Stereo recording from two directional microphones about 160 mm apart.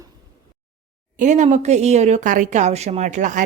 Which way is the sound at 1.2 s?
50° right (ahead or behind).